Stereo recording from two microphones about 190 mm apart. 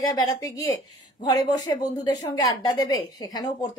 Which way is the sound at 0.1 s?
20° left (ahead or behind).